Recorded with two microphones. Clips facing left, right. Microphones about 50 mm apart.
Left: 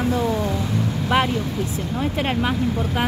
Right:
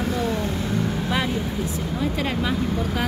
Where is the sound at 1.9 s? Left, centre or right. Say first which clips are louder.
Left 3 dB; left.